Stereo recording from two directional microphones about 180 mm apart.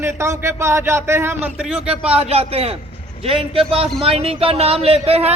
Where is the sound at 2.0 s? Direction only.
35° right (ahead or behind).